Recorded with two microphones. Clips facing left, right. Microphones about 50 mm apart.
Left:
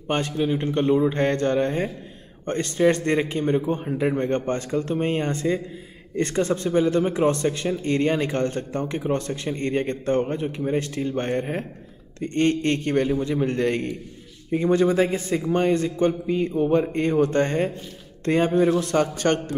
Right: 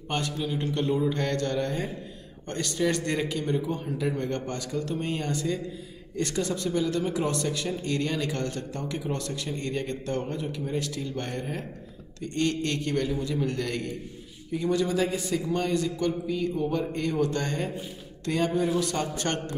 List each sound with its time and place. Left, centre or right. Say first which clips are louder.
0.1 s a man's voice: left 7 dB; left